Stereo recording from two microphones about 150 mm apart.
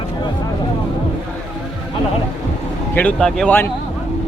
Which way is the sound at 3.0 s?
5° left (ahead or behind).